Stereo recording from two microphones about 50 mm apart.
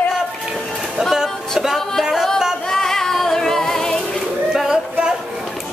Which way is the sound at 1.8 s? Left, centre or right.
Centre.